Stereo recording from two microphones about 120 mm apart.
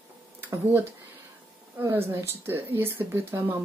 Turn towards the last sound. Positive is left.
turn(degrees=-20)  # may be behind; listen again after turning